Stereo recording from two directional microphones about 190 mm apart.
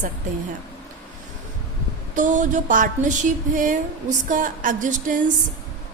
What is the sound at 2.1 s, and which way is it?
Speech, 40° right (ahead or behind).